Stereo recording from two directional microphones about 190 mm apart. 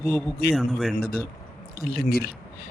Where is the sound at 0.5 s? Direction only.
Centre (ahead or behind).